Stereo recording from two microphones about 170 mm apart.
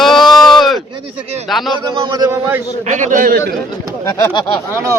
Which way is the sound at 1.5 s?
Centre (ahead or behind).